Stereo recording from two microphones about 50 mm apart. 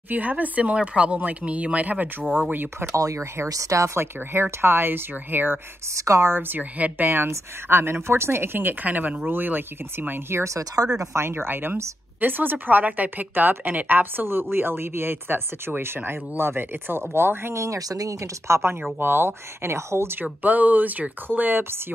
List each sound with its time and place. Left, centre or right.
0.1 s speech: right
2.5 s a woman's voice: right
3.1 s speech: right
4.0 s speech: right
5.9 s a woman's voice: right
6.3 s speech: right
6.6 s a woman's voice: right
7.6 s speech: right
11.0 s a woman's voice: right
18.2 s speech: right
18.9 s speech: right
20.4 s a woman's voice: right